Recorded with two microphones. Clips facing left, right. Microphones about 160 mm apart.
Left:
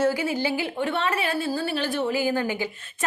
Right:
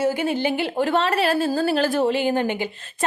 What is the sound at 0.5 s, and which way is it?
Speech, 80° right.